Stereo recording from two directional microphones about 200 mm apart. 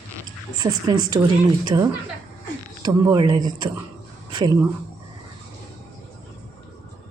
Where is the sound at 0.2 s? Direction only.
20° right (ahead or behind).